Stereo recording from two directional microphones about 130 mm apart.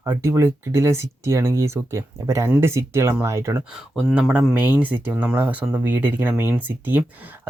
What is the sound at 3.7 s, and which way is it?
Speech, 5° right (ahead or behind).